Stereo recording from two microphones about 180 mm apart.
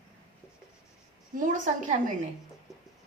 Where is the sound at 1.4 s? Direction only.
45° right (ahead or behind).